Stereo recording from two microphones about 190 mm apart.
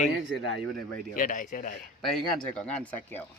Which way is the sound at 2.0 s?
5° left (ahead or behind).